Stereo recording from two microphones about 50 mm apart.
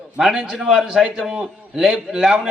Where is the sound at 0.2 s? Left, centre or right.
Centre.